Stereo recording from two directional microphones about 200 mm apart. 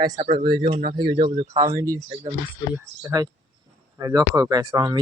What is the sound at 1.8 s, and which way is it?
Speech, 15° right (ahead or behind).